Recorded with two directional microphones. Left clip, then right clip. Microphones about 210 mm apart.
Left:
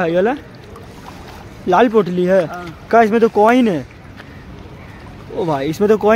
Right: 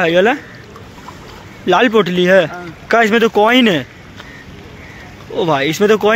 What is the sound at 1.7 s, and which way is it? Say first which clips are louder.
A man's voice: right 1 dB; centre (ahead or behind).